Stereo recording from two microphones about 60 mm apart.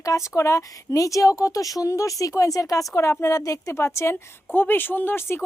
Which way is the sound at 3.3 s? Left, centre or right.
Left.